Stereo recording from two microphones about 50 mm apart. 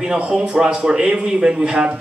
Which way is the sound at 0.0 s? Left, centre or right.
Centre.